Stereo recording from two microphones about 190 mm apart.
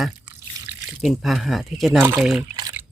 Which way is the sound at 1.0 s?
Centre (ahead or behind).